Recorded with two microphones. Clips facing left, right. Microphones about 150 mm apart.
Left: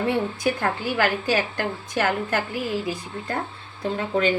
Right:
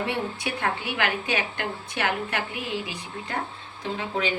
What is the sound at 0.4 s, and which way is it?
A woman's voice, 40° left (ahead or behind).